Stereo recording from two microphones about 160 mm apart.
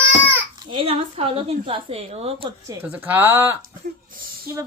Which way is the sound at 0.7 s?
35° right (ahead or behind).